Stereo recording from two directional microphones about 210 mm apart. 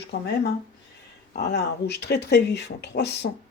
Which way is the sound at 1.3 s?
50° left (ahead or behind).